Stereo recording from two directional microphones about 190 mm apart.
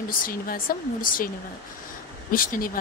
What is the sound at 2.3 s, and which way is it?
Speech, 50° left (ahead or behind).